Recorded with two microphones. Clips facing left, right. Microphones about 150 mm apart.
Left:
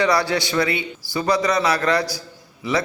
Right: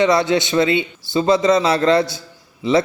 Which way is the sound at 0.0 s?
20° right (ahead or behind).